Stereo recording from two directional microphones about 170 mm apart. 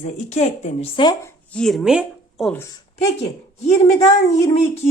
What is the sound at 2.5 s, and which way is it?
Speech, 15° left (ahead or behind).